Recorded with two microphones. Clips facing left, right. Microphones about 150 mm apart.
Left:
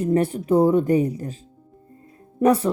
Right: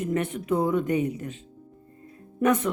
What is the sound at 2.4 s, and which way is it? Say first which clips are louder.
Speech: left 5 dB; 35° left (ahead or behind).